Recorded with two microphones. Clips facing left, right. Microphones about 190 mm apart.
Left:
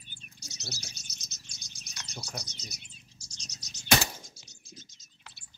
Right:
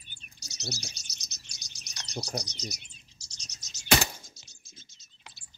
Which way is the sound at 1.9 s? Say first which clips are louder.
Right 2 dB; 40° right (ahead or behind).